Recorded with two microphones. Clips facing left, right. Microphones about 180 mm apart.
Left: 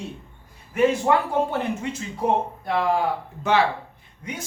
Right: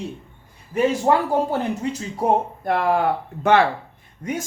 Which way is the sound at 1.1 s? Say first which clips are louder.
Right 2 dB; 35° right (ahead or behind).